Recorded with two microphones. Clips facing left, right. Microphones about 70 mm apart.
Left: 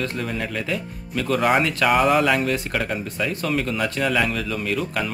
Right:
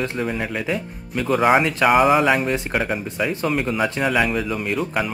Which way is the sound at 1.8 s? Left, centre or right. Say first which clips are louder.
Right 3 dB; centre.